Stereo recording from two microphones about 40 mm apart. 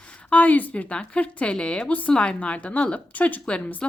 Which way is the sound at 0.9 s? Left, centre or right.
Left.